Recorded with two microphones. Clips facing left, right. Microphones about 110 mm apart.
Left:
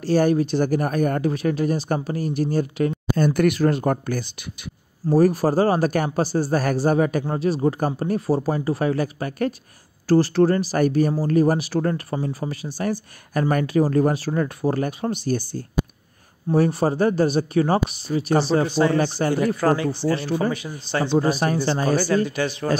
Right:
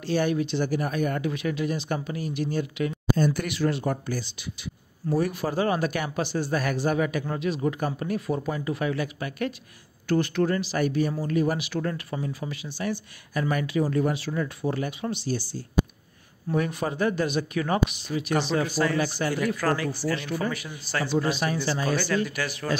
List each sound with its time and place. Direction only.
0.0 s speech: 40° left (ahead or behind)
5.0 s speech: 40° left (ahead or behind)
16.4 s speech: 35° left (ahead or behind)
21.3 s speech: 40° left (ahead or behind)
22.3 s speech: 25° left (ahead or behind)